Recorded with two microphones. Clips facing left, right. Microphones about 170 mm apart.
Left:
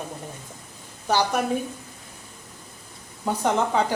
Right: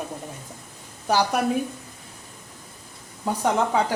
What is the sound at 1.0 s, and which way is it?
Speech, 10° right (ahead or behind).